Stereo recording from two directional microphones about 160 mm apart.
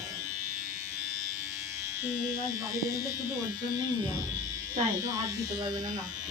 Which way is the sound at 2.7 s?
20° right (ahead or behind).